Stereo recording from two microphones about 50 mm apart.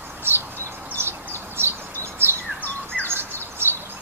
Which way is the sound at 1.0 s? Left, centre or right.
Right.